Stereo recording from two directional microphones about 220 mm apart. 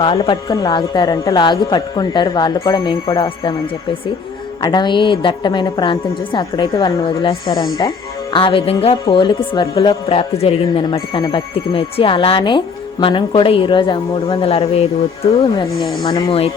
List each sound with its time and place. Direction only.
0.0 s a woman's voice: 20° left (ahead or behind)
4.6 s a woman's voice: 20° left (ahead or behind)